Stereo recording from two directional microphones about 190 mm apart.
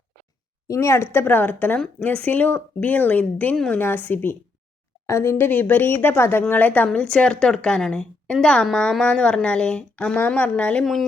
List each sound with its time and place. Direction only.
0.7 s speech: 15° left (ahead or behind)